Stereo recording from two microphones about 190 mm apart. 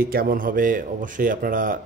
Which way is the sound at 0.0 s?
50° right (ahead or behind).